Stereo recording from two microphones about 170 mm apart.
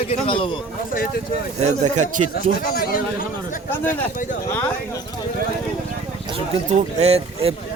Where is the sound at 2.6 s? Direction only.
60° left (ahead or behind).